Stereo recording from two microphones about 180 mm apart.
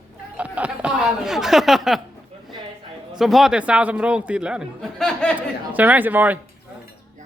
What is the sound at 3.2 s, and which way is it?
Speech, centre (ahead or behind).